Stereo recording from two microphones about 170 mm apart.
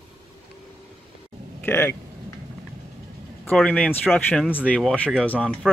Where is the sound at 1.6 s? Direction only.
10° left (ahead or behind).